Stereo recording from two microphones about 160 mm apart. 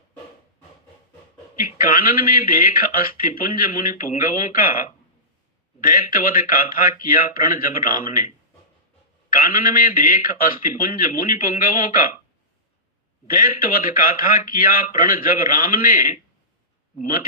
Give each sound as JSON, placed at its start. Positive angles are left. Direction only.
{"t": 1.5, "sound": "a man's voice", "side_deg": 60}
{"t": 9.3, "sound": "a man's voice", "side_deg": 60}
{"t": 13.2, "sound": "a man's voice", "side_deg": 60}